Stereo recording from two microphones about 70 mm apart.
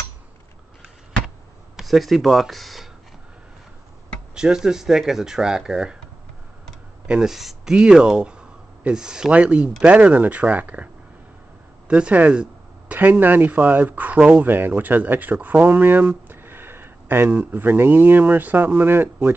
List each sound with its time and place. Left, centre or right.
1.8 s speech: centre
4.4 s speech: centre
7.1 s speech: centre
11.9 s speech: right
15.3 s a sound: right
17.4 s speech: right